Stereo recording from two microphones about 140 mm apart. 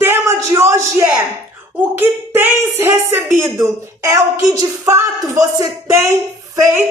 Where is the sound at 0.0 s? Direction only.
20° right (ahead or behind).